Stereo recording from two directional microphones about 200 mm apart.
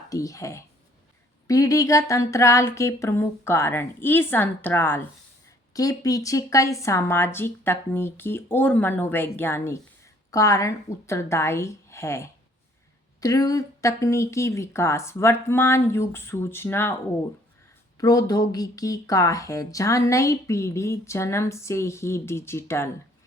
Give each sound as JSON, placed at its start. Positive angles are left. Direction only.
{"t": 0.1, "sound": "speech", "side_deg": 15}
{"t": 17.9, "sound": "speech", "side_deg": 20}